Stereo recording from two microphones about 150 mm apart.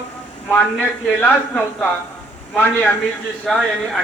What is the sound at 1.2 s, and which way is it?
A man's voice, 5° left (ahead or behind).